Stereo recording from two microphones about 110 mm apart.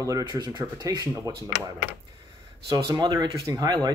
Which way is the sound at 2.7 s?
40° right (ahead or behind).